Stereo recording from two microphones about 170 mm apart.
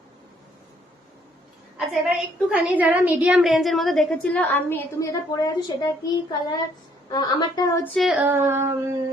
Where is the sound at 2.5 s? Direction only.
10° right (ahead or behind); by 5.7 s 20° left (ahead or behind).